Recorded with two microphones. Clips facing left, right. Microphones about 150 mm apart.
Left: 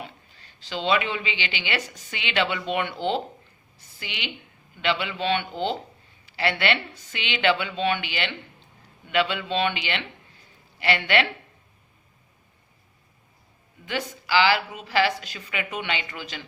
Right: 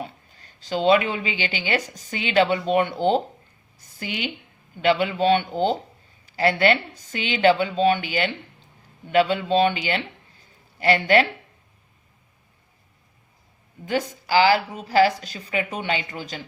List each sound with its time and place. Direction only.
0.0 s a woman's voice: 45° right (ahead or behind)
13.8 s a woman's voice: 40° right (ahead or behind)